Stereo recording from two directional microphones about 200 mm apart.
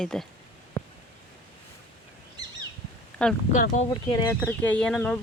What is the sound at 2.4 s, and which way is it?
Bird, 20° right (ahead or behind).